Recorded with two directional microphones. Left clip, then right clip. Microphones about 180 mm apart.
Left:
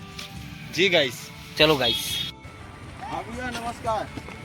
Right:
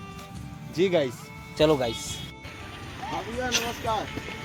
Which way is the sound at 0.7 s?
25° right (ahead or behind).